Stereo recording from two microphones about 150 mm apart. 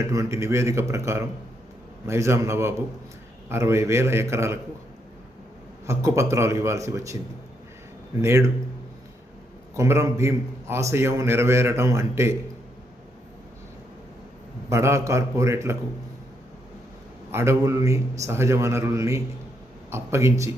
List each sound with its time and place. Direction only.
0.1 s a man's voice: 20° right (ahead or behind)
5.8 s a man's voice: 20° right (ahead or behind)
8.2 s a man's voice: 20° right (ahead or behind)
9.7 s a man's voice: 20° right (ahead or behind)
14.7 s a man's voice: 20° right (ahead or behind)
17.3 s a man's voice: 20° right (ahead or behind)